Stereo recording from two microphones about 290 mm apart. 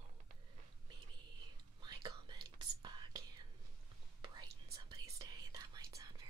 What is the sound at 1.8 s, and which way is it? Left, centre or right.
Whispering, centre.